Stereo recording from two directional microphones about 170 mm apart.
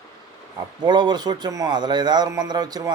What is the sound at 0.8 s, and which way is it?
A man's voice, 25° right (ahead or behind).